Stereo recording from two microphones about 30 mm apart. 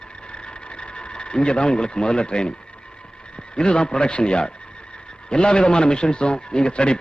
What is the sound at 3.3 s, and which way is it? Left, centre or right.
A man's voice, left.